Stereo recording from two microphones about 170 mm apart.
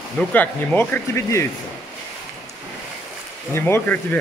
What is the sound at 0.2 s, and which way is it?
Speech, 5° left (ahead or behind).